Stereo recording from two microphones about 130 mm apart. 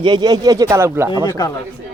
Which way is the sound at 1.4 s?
30° left (ahead or behind).